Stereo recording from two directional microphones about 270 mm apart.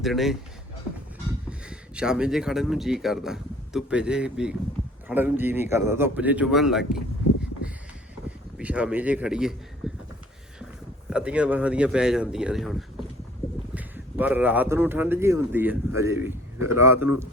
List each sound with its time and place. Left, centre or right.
0.0 s speech: centre
1.5 s speech: centre
8.5 s speech: centre
11.1 s speech: centre
13.7 s speech: centre